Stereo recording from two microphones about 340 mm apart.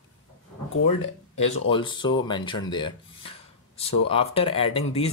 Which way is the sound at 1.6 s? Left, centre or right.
Centre.